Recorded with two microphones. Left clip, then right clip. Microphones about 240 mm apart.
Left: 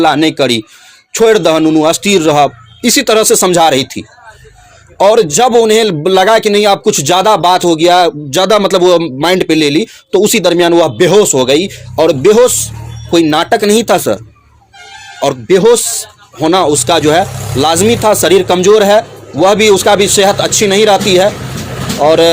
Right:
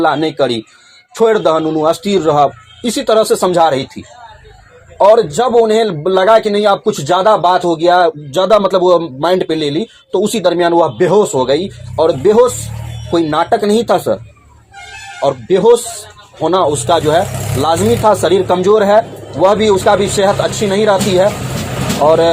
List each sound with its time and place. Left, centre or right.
0.0 s a man's voice: left
15.2 s a man's voice: left